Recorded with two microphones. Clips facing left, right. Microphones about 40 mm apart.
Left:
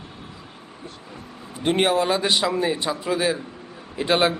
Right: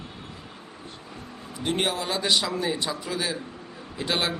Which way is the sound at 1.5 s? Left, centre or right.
Left.